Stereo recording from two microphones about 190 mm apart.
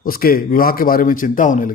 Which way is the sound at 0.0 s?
50° left (ahead or behind).